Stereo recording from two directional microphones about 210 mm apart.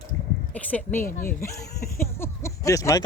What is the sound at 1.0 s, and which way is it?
Speech, 40° left (ahead or behind).